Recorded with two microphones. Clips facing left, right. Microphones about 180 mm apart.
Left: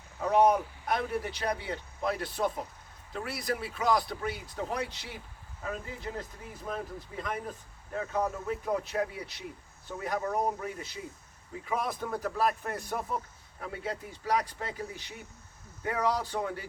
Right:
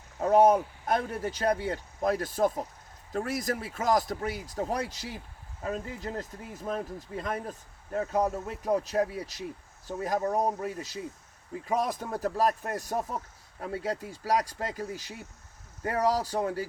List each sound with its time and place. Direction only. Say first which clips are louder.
0.2 s speech: right 3 dB; 45° right (ahead or behind)
7.9 s speech: right 4 dB; 40° right (ahead or behind)